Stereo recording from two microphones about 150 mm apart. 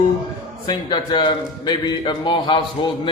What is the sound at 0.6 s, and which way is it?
A man's voice, 30° left (ahead or behind).